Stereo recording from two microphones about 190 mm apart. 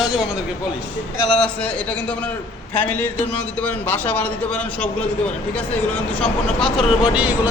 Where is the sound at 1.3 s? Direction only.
5° left (ahead or behind).